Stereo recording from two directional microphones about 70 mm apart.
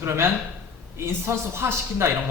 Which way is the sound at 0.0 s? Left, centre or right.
Right.